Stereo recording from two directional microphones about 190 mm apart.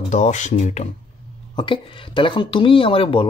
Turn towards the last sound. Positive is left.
turn(degrees=30)  # may be behind; listen again after turning